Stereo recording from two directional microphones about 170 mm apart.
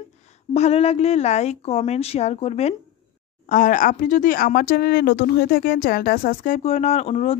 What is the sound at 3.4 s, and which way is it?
Speech, 50° left (ahead or behind).